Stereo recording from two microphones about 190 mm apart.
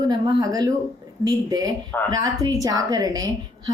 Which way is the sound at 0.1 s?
20° right (ahead or behind).